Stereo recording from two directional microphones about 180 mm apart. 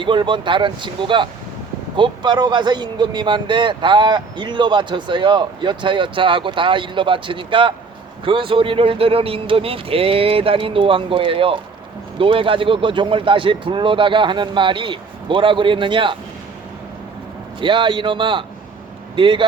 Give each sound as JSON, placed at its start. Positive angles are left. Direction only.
{"t": 0.0, "sound": "a man's voice", "side_deg": -25}
{"t": 17.6, "sound": "a man's voice", "side_deg": -25}